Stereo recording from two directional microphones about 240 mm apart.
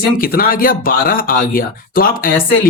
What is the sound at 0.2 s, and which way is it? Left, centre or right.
Speech, left.